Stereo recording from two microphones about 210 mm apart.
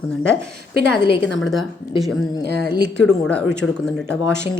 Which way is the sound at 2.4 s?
50° right (ahead or behind).